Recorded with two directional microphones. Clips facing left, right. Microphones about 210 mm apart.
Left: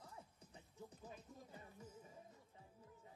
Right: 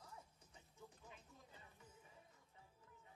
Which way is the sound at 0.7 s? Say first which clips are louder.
Left 6 dB; 40° left (ahead or behind).